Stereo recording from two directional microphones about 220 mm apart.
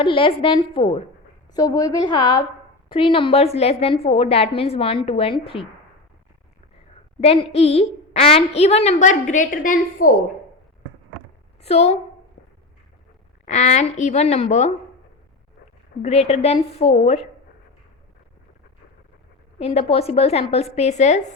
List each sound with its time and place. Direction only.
0.0 s a woman's voice: 25° left (ahead or behind)
7.2 s a woman's voice: 25° left (ahead or behind)
11.6 s a woman's voice: 30° left (ahead or behind)
13.4 s speech: 30° left (ahead or behind)
16.0 s a woman's voice: 30° left (ahead or behind)
19.5 s a woman's voice: 25° left (ahead or behind)